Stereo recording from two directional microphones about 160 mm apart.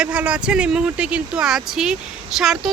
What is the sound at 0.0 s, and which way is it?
Speech, 5° right (ahead or behind).